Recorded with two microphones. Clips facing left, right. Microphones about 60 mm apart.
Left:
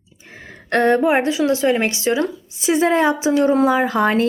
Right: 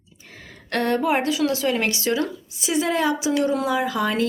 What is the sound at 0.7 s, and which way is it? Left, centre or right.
Speech, left.